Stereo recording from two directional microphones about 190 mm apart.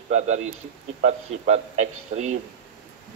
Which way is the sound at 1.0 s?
35° right (ahead or behind).